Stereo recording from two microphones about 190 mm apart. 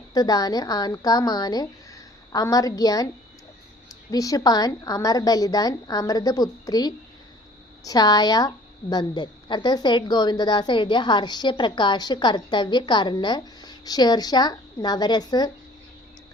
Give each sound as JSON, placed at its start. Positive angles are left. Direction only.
{"t": 0.1, "sound": "a woman's voice", "side_deg": 20}
{"t": 4.1, "sound": "a woman's voice", "side_deg": 20}